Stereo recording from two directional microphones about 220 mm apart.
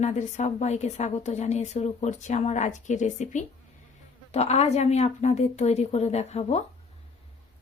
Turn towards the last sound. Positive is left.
turn(degrees=30)  # may be behind; listen again after turning